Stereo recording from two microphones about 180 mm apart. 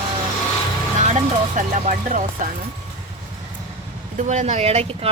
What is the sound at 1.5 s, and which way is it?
Speech, 45° right (ahead or behind).